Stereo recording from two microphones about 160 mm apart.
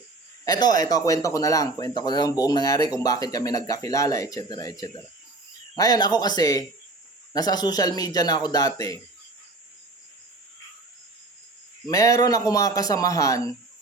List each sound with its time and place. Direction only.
0.4 s speech: 25° left (ahead or behind)
11.9 s speech: 20° left (ahead or behind)